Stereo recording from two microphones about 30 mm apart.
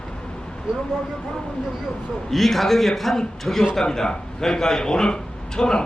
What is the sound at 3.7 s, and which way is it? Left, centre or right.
Speech, centre.